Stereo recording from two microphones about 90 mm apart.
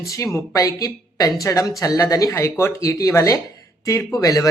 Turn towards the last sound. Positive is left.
turn(degrees=40)  # may be behind; listen again after turning